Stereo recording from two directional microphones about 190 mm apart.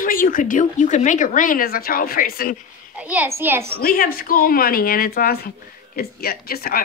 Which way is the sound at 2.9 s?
5° right (ahead or behind).